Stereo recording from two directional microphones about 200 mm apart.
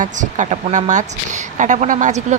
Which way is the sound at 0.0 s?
40° right (ahead or behind).